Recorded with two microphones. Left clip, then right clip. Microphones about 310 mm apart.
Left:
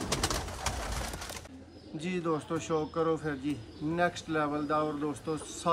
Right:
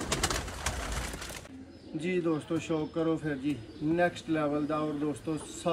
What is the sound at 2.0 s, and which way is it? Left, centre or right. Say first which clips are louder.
Speech: right 2 dB; centre.